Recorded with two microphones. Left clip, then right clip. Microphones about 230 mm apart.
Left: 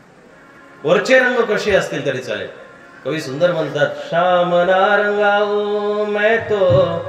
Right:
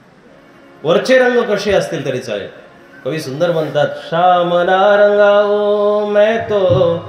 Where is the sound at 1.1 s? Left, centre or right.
Right.